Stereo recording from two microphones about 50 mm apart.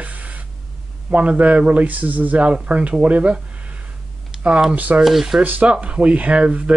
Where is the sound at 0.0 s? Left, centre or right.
Right.